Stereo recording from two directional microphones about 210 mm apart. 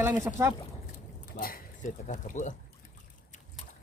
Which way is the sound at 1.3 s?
45° left (ahead or behind).